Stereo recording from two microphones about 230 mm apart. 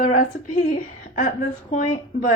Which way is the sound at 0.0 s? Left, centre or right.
Left.